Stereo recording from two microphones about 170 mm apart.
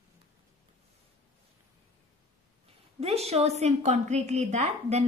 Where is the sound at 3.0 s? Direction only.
35° right (ahead or behind).